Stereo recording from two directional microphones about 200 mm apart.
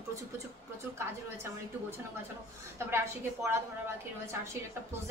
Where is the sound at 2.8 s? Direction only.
15° right (ahead or behind).